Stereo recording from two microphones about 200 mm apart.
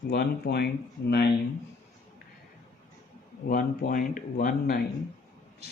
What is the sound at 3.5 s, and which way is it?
A man's voice, 45° left (ahead or behind).